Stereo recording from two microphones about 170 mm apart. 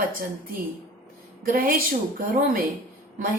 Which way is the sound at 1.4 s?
55° right (ahead or behind).